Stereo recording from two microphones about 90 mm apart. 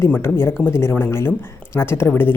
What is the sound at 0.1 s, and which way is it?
A woman's voice, 25° left (ahead or behind).